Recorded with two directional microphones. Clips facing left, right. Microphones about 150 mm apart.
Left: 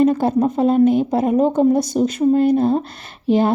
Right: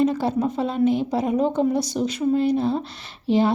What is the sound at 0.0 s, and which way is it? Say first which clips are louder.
Speech: left 5 dB; 50° left (ahead or behind).